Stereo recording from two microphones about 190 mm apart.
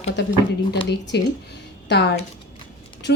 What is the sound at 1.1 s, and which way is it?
A woman's voice, 60° left (ahead or behind).